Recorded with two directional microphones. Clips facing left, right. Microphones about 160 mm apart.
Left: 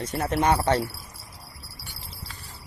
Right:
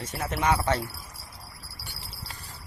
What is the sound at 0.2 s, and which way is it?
Speech, 35° left (ahead or behind).